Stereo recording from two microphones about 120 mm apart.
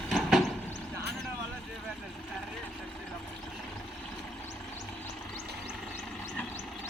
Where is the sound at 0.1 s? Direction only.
Centre (ahead or behind).